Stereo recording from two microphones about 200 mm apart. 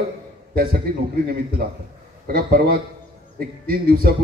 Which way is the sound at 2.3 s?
50° right (ahead or behind).